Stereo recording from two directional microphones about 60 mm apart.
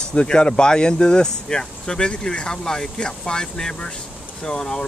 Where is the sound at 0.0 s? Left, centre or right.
Centre.